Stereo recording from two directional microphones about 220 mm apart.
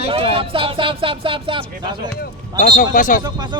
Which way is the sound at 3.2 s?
20° right (ahead or behind).